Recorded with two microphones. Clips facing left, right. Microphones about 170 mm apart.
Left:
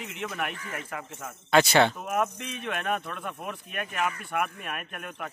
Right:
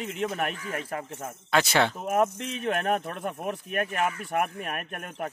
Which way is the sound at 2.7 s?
45° right (ahead or behind).